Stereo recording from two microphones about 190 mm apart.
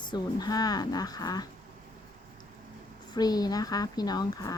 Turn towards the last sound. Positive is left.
turn(degrees=20)  # may be behind; listen again after turning